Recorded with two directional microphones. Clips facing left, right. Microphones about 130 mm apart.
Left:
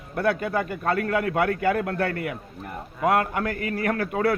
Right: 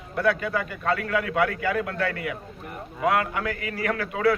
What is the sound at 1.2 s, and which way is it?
Speech, 45° left (ahead or behind).